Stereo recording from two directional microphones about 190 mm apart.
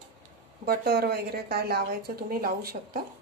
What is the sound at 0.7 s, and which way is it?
A woman's voice, 55° right (ahead or behind).